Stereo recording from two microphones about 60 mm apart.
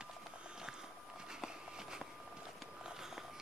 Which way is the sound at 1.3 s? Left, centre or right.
Centre.